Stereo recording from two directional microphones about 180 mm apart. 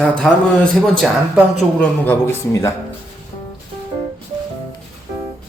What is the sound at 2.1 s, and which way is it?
Speech, 15° left (ahead or behind).